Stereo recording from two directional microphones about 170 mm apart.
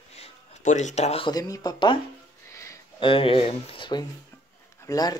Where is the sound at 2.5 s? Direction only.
20° left (ahead or behind).